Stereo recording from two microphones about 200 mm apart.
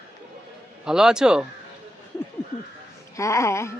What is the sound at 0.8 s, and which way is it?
Speech, 5° right (ahead or behind).